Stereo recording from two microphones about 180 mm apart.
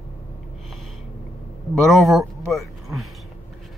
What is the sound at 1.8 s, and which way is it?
Speech, centre (ahead or behind).